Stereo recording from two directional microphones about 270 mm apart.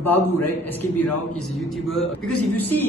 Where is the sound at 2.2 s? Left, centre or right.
Left.